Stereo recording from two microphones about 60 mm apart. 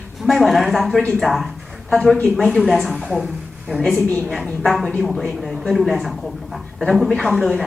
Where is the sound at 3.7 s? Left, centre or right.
Centre.